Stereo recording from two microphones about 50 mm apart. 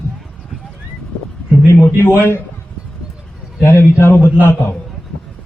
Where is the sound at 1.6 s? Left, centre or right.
Left.